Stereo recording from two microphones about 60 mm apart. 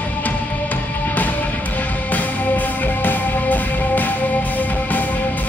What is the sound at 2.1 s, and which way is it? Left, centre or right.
Music, left.